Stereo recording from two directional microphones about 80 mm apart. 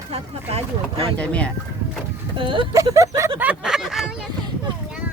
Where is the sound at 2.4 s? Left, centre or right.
Right.